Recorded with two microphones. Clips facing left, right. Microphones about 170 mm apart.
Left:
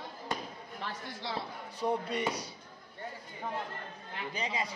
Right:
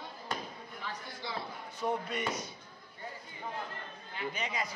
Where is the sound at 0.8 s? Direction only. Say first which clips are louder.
Left 2 dB; 85° left.